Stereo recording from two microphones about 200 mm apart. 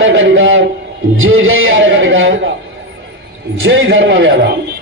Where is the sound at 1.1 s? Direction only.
85° right; by 2.5 s 70° right (ahead or behind).